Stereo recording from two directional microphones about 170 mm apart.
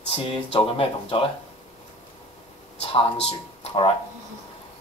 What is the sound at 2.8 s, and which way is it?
Speech, 35° left (ahead or behind).